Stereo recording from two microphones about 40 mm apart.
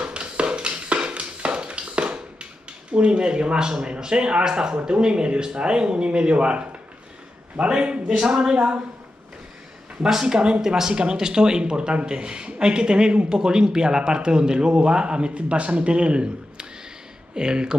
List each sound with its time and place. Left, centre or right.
0.0 s a sound: right
2.9 s a man's voice: right
10.2 s a man's voice: right